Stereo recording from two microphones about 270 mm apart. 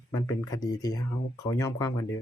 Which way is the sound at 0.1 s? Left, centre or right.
Centre.